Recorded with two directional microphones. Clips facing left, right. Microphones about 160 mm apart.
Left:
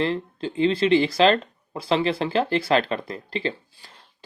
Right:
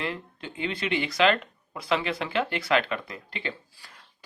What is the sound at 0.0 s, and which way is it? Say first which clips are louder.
Speech: left 9 dB; 30° left (ahead or behind).